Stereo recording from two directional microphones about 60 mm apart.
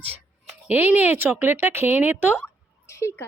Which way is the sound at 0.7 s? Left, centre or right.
Right.